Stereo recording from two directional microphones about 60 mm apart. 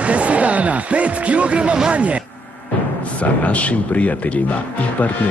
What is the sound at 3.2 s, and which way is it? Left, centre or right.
Speech, left.